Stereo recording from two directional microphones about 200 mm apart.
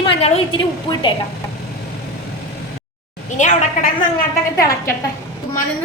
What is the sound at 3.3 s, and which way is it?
Speech, 35° left (ahead or behind).